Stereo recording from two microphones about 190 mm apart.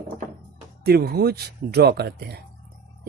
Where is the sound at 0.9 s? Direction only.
55° right (ahead or behind).